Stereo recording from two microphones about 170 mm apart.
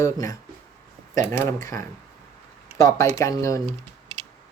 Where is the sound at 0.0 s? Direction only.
20° left (ahead or behind).